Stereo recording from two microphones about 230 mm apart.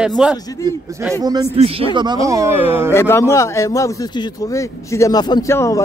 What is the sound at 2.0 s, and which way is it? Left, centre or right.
Speech, centre.